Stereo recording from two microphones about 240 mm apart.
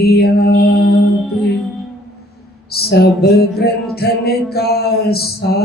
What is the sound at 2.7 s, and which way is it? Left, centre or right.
Music, left.